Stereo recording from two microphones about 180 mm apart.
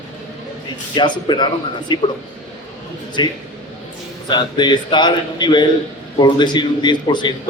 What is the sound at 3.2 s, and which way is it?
A man's voice, 25° left (ahead or behind).